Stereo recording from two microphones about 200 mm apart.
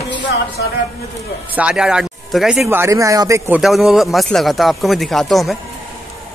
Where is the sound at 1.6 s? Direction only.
5° right (ahead or behind).